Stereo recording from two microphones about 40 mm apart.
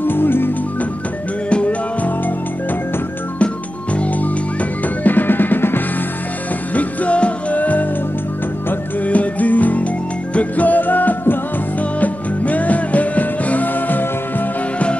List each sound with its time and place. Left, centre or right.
0.0 s music: left
1.5 s music: left
3.9 s music: left
6.7 s music: left
9.0 s music: left